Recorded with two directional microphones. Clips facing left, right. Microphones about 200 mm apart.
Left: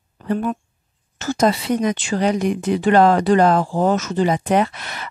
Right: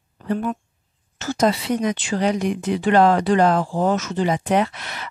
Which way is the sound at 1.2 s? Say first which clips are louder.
Left 2 dB; 50° left (ahead or behind).